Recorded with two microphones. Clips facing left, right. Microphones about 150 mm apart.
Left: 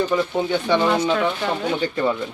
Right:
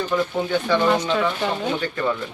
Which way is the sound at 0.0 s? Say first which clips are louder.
Left 2 dB; 15° left (ahead or behind).